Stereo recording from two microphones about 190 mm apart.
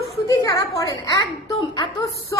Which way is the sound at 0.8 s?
20° left (ahead or behind).